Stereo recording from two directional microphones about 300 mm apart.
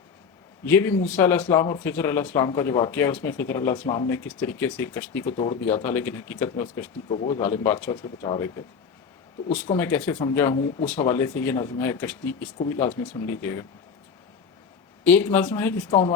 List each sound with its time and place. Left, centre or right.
0.6 s speech: centre
15.0 s speech: centre